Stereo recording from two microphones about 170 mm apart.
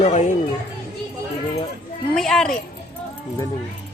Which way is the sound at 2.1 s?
5° left (ahead or behind).